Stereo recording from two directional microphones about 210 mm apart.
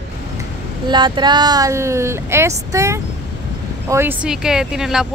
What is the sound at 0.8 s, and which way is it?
Speech, 20° right (ahead or behind).